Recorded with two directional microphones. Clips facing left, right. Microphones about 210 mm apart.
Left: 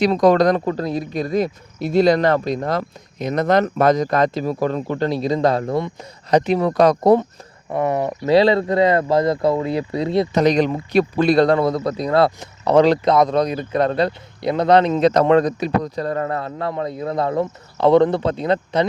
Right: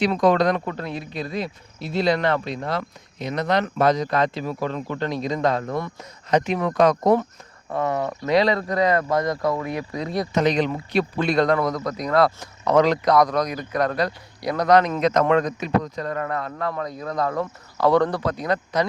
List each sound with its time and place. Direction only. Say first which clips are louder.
0.0 s speech: left 4 dB; 40° left (ahead or behind)
7.7 s speech: left 4 dB; 20° left (ahead or behind)
10.4 s speech: left 5 dB; 40° left (ahead or behind)